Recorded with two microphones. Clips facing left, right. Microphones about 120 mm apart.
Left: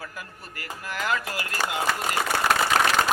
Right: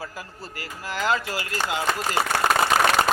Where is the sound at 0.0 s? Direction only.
30° right (ahead or behind).